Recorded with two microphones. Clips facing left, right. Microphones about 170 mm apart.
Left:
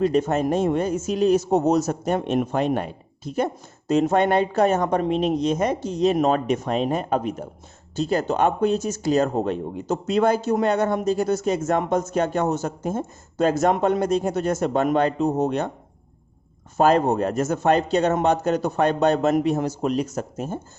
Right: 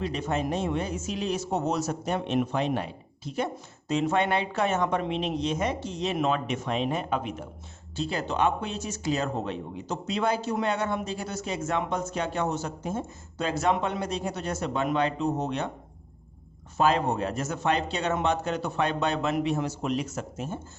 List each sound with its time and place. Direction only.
0.0 s speech: 45° left (ahead or behind)
16.7 s speech: 45° left (ahead or behind)